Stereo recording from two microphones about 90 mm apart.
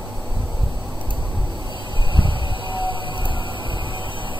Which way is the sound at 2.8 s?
65° right (ahead or behind).